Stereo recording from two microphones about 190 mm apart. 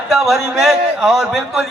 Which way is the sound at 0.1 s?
Centre (ahead or behind).